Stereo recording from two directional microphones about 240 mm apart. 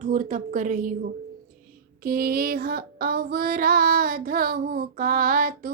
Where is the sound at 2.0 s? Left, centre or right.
Right.